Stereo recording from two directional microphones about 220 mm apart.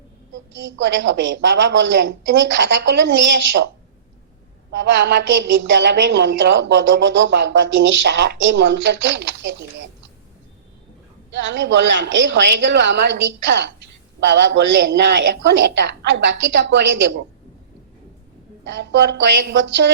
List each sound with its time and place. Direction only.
0.5 s a woman's voice: 55° right (ahead or behind)
4.7 s a woman's voice: 55° right (ahead or behind)
11.3 s a woman's voice: 55° right (ahead or behind)
18.6 s a woman's voice: 55° right (ahead or behind)